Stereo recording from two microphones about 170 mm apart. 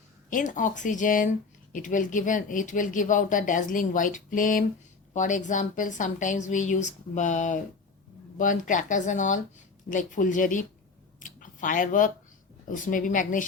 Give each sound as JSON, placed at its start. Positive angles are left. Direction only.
{"t": 0.3, "sound": "speech", "side_deg": 50}
{"t": 11.2, "sound": "a sound", "side_deg": 50}
{"t": 12.7, "sound": "speech", "side_deg": 50}